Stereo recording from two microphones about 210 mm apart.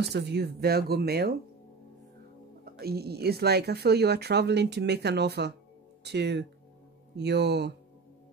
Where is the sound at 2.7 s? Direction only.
45° right (ahead or behind).